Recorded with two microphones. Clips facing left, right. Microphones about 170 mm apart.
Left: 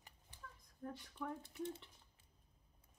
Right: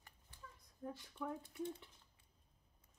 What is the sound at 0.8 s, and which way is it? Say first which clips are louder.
Speech: right 1 dB; 5° right (ahead or behind).